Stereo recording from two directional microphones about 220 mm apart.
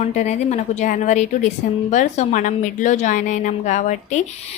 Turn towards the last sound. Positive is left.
turn(degrees=35)  # may be behind; listen again after turning